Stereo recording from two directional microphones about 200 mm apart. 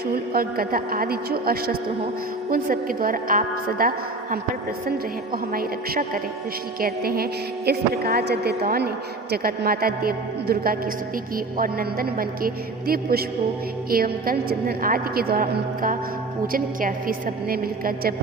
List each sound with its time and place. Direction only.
0.1 s a woman's voice: 45° right (ahead or behind)